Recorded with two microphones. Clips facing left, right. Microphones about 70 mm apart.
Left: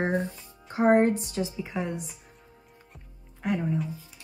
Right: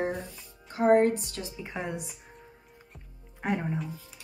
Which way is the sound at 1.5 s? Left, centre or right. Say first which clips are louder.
Left 3 dB; centre.